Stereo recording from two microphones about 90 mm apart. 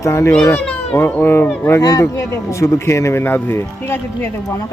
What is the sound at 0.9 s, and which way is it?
Speech, 20° left (ahead or behind).